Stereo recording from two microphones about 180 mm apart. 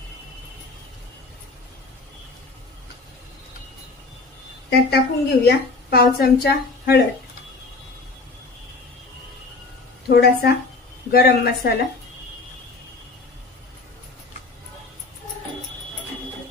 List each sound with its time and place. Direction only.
4.6 s a woman's voice: 65° left (ahead or behind)
10.0 s a woman's voice: 65° left (ahead or behind)